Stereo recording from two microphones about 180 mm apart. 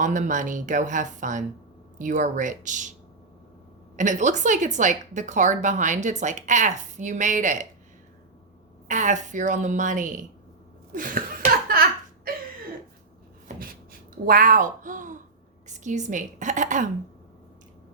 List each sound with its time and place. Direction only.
0.0 s a woman's voice: 45° right (ahead or behind)
3.9 s a woman's voice: 45° right (ahead or behind)
8.9 s a woman's voice: 40° right (ahead or behind)
11.7 s a sound: 55° right (ahead or behind)
14.3 s a woman's voice: 50° right (ahead or behind)